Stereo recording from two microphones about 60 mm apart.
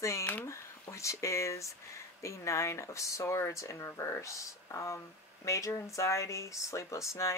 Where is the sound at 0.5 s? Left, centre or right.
Left.